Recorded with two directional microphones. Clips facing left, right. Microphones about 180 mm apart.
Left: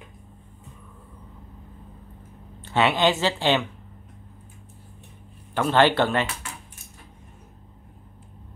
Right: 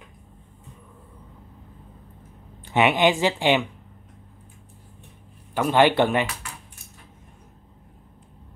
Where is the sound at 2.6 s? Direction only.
15° right (ahead or behind).